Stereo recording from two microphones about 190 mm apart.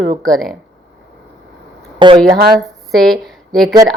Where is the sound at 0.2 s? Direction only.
Centre (ahead or behind).